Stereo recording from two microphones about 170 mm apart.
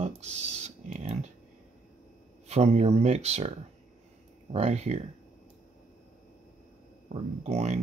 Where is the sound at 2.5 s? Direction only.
40° right (ahead or behind).